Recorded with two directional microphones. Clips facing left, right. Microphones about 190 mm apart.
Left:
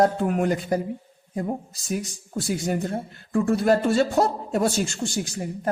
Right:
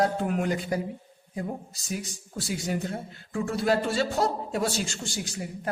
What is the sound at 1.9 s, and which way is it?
Speech, 50° left (ahead or behind).